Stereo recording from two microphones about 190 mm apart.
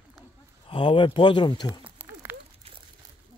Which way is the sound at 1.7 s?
10° right (ahead or behind).